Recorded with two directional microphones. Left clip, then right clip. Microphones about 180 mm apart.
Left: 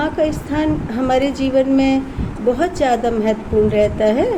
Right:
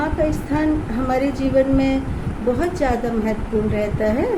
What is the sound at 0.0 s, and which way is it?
Speech, 50° left (ahead or behind).